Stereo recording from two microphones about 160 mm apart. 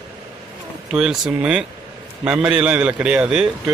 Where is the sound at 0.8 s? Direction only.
5° right (ahead or behind).